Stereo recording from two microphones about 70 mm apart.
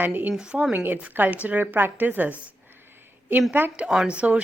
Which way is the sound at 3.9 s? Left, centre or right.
Centre.